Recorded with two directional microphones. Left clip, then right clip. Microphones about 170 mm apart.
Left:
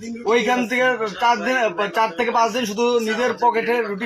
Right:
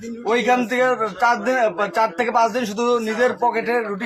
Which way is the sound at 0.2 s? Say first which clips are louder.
Even; 15° right (ahead or behind).